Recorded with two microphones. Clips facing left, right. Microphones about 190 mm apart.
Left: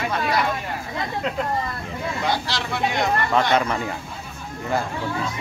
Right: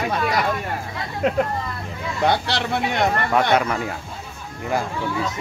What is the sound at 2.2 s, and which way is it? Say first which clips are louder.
Speech: right 7 dB; 60° right (ahead or behind).